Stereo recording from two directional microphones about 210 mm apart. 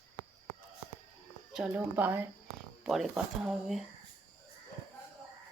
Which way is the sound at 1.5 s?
5° right (ahead or behind).